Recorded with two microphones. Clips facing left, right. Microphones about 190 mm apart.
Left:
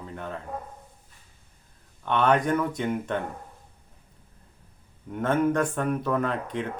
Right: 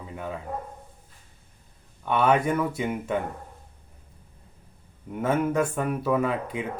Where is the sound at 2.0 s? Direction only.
5° right (ahead or behind).